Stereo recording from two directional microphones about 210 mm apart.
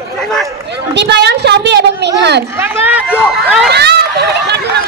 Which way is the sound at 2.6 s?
10° right (ahead or behind).